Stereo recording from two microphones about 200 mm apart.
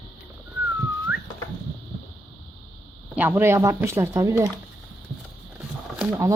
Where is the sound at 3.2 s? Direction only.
10° right (ahead or behind).